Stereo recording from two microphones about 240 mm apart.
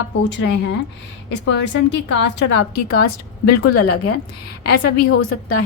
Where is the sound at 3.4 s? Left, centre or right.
Left.